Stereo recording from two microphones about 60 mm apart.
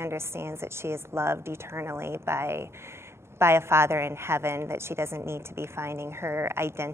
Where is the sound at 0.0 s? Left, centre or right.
Right.